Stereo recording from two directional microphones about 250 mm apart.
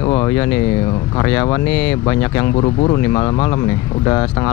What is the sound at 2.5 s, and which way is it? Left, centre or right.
Speech, left.